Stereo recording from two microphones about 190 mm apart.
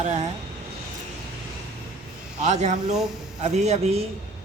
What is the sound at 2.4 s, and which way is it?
A man's voice, 35° right (ahead or behind).